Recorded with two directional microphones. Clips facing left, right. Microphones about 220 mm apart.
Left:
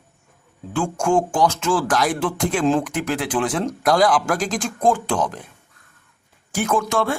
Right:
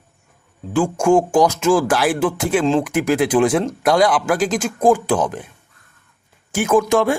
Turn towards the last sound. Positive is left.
turn(degrees=-15)  # may be behind; listen again after turning